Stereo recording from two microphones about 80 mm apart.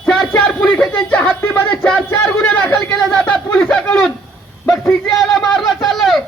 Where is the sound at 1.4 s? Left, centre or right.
Left.